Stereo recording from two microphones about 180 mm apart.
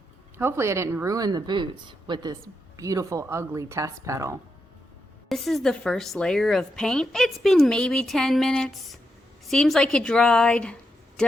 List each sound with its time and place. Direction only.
0.3 s speech: 15° right (ahead or behind)
5.3 s a woman's voice: centre (ahead or behind)